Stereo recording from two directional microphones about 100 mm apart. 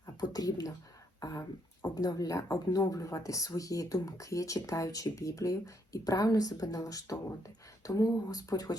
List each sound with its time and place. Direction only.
0.0 s speech: 40° left (ahead or behind)